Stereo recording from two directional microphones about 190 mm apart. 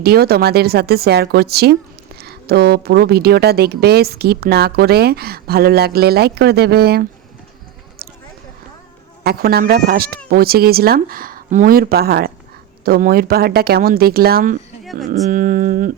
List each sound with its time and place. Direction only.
0.0 s a woman's voice: 55° right (ahead or behind)
9.2 s speech: 55° right (ahead or behind)